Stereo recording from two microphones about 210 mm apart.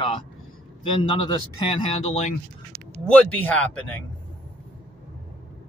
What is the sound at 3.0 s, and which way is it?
Speech, 5° left (ahead or behind).